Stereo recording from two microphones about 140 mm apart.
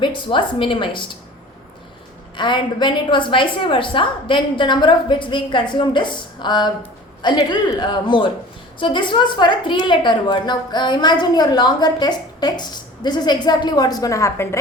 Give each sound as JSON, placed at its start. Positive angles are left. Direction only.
{"t": 0.0, "sound": "a woman's voice", "side_deg": 35}
{"t": 2.3, "sound": "a woman's voice", "side_deg": 35}